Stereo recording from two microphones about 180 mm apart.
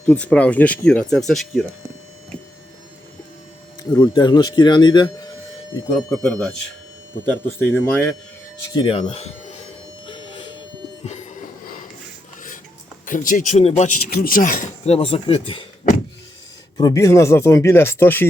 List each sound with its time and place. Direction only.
0.0 s speech: 5° left (ahead or behind)
3.9 s speech: 20° left (ahead or behind)
6.1 s speech: 15° left (ahead or behind)
7.6 s speech: 10° left (ahead or behind)
8.7 s speech: 25° left (ahead or behind)
10.1 s a sound: 25° left (ahead or behind)
11.0 s music: 40° left (ahead or behind)
13.1 s speech: 45° left (ahead or behind)
14.1 s speech: 55° left (ahead or behind)
14.8 s speech: 35° left (ahead or behind)
16.7 s speech: 20° left (ahead or behind)